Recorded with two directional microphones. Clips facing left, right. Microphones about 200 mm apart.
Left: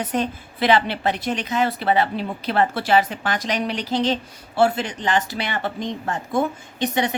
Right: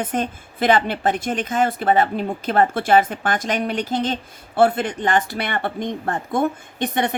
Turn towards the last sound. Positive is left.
turn(degrees=-55)  # may be behind; listen again after turning